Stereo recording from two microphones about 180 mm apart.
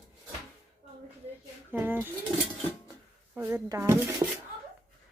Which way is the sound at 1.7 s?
10° right (ahead or behind).